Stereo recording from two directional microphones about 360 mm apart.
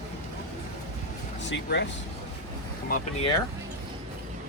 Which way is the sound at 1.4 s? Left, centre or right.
Left.